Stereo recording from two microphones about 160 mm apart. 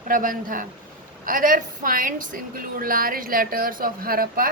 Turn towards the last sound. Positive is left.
turn(degrees=-65)  # may be behind; listen again after turning